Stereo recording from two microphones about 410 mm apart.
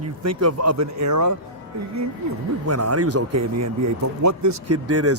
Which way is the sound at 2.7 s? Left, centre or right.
Right.